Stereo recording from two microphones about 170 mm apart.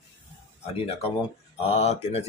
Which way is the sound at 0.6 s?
35° left (ahead or behind).